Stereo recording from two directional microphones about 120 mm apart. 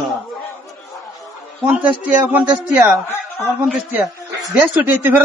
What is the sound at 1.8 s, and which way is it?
Speech, 10° right (ahead or behind).